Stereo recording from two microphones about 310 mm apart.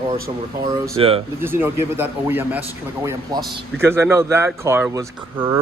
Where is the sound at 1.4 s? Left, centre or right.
Centre.